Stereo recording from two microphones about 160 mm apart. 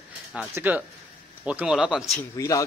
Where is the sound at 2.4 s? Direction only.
20° left (ahead or behind).